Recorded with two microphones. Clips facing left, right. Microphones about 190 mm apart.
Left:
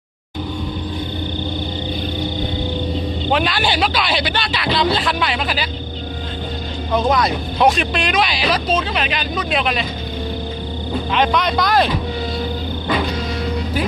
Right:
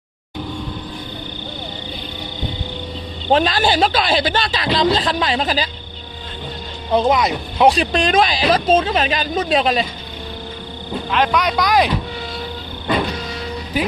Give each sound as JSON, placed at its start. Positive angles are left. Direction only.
{"t": 3.3, "sound": "speech", "side_deg": -40}
{"t": 6.9, "sound": "speech", "side_deg": -20}
{"t": 7.7, "sound": "speech", "side_deg": -40}
{"t": 11.1, "sound": "speech", "side_deg": -5}